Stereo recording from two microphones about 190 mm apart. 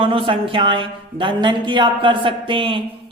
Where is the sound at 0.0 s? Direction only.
30° right (ahead or behind).